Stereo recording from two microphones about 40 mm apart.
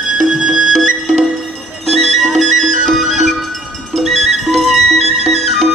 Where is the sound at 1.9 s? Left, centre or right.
Centre.